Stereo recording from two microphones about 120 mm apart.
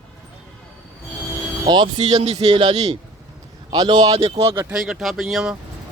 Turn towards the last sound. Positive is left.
turn(degrees=-5)  # may be behind; listen again after turning